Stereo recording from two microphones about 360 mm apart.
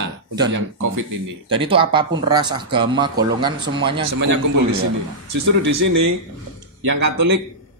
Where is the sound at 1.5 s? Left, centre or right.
Centre.